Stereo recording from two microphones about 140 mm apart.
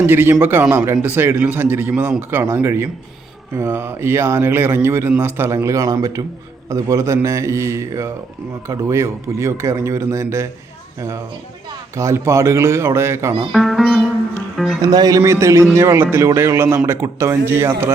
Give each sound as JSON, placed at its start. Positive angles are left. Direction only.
{"t": 0.0, "sound": "speech", "side_deg": -15}
{"t": 11.9, "sound": "speech", "side_deg": -20}
{"t": 13.5, "sound": "speech", "side_deg": 0}
{"t": 14.8, "sound": "speech", "side_deg": -30}